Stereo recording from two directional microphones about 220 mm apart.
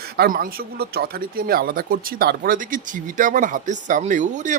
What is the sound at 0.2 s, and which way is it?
Speech, 45° right (ahead or behind).